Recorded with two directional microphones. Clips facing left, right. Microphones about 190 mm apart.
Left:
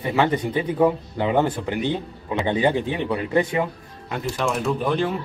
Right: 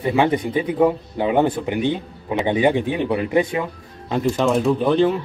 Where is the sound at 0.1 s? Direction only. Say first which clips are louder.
Right 2 dB; 15° right (ahead or behind).